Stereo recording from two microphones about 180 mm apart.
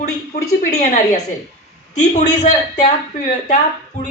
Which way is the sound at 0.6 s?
40° left (ahead or behind).